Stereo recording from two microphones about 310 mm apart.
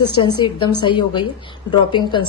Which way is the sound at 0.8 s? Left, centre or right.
Centre.